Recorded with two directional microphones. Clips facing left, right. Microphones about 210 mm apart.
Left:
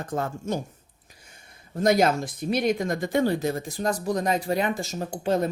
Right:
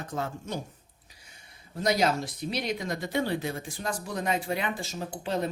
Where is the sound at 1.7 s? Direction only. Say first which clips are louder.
Left 5 dB; 50° left (ahead or behind).